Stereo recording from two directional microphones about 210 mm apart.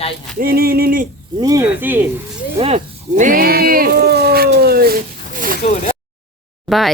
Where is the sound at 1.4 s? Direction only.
15° right (ahead or behind).